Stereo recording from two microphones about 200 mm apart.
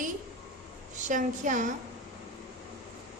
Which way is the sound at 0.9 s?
40° right (ahead or behind).